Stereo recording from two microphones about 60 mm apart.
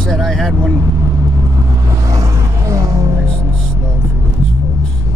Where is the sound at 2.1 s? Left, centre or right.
Right.